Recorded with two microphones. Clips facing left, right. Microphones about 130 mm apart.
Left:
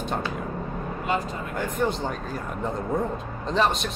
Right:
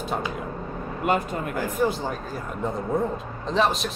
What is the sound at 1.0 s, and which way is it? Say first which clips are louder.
Speech: right 5 dB; 55° right (ahead or behind).